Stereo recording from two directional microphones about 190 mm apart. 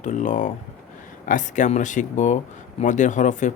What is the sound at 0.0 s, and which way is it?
Speech, 40° left (ahead or behind).